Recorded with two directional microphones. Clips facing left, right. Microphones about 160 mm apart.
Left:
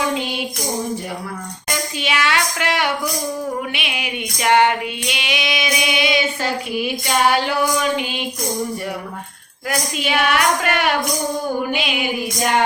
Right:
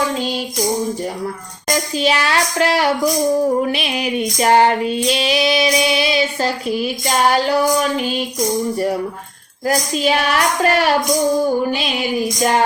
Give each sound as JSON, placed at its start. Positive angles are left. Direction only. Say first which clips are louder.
{"t": 2.0, "sound": "female singing", "louder": "right 3 dB", "side_deg": -35}
{"t": 9.6, "sound": "female singing", "louder": "right 6 dB", "side_deg": -35}